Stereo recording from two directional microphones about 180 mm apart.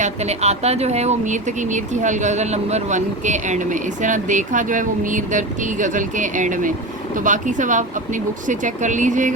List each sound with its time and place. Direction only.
0.0 s speech: 35° right (ahead or behind)